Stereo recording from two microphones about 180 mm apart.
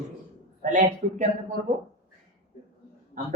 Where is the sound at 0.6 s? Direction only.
40° right (ahead or behind).